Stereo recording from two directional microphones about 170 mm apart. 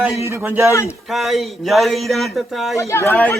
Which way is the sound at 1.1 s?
Centre (ahead or behind).